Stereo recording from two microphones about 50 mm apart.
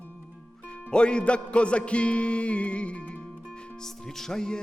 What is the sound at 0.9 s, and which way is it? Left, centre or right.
Music, centre.